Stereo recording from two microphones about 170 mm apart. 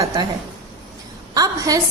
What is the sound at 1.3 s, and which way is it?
Speech, 20° right (ahead or behind).